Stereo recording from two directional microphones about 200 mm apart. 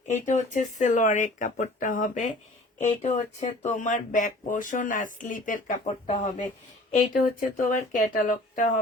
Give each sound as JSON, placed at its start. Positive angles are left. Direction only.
{"t": 0.1, "sound": "speech", "side_deg": 35}